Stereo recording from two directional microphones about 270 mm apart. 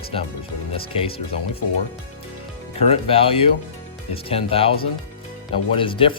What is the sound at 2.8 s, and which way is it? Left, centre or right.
Speech, left.